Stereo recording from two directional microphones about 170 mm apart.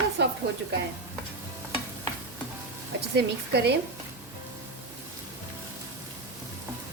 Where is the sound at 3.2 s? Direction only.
75° right (ahead or behind).